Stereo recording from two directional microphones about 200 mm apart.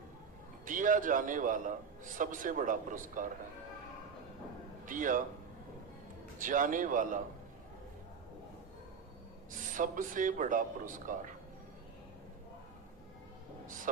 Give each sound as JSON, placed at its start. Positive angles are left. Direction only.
{"t": 0.6, "sound": "speech", "side_deg": -40}
{"t": 4.9, "sound": "speech", "side_deg": -40}
{"t": 6.4, "sound": "speech", "side_deg": -40}
{"t": 9.7, "sound": "speech", "side_deg": -40}
{"t": 13.9, "sound": "speech", "side_deg": -40}